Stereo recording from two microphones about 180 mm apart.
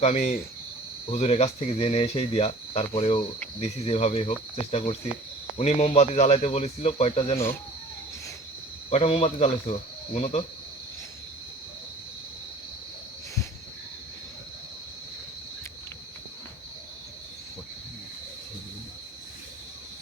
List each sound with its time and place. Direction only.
0.0 s speech: 35° left (ahead or behind)
8.9 s speech: 35° left (ahead or behind)